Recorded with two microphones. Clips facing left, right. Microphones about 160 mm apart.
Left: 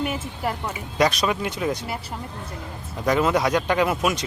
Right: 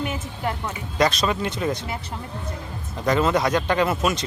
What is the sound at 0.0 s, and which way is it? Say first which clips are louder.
Speech: left 1 dB; 5° left (ahead or behind).